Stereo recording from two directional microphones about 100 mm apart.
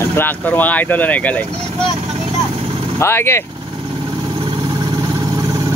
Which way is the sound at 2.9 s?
25° left (ahead or behind).